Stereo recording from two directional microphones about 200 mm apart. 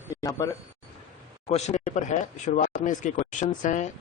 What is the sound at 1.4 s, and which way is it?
Speech, 35° left (ahead or behind).